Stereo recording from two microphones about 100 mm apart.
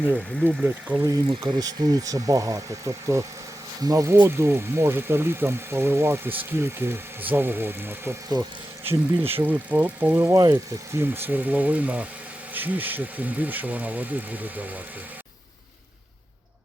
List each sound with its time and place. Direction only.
0.1 s speech: 15° right (ahead or behind)
1.0 s speech: 35° right (ahead or behind)
10.3 s speech: 40° right (ahead or behind)
10.9 s speech: 20° right (ahead or behind)